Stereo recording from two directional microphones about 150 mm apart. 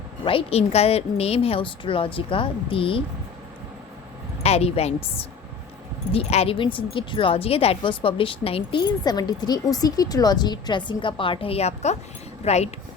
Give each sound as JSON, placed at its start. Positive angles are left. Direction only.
{"t": 0.3, "sound": "a woman's voice", "side_deg": 40}
{"t": 4.4, "sound": "speech", "side_deg": 45}
{"t": 6.1, "sound": "a woman's voice", "side_deg": 40}